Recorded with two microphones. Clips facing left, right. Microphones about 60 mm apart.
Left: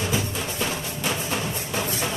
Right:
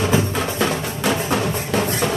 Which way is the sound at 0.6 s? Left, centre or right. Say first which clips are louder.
Right 6 dB; right.